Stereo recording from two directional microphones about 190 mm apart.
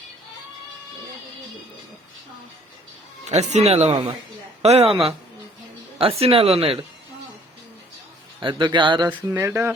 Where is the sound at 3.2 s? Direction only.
35° right (ahead or behind).